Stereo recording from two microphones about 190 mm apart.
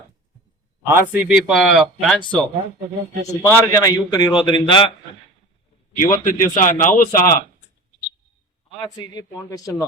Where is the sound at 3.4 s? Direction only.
20° left (ahead or behind).